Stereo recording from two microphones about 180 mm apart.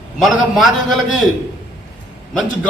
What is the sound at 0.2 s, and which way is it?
A man's voice, centre (ahead or behind).